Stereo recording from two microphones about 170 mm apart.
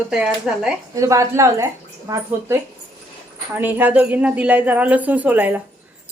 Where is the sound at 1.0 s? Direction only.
20° right (ahead or behind).